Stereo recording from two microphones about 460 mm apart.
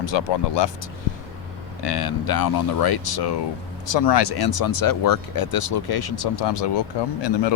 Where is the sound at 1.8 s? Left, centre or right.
Left.